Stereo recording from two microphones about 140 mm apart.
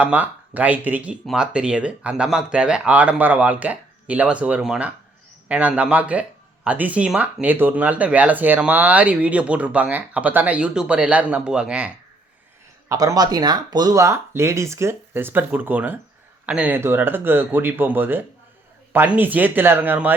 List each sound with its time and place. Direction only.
0.0 s speech: 10° right (ahead or behind)
12.9 s speech: 25° right (ahead or behind)